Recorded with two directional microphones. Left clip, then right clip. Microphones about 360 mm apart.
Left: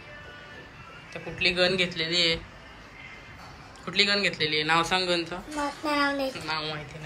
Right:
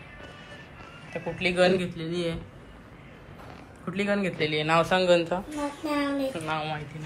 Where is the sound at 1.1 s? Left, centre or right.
Centre.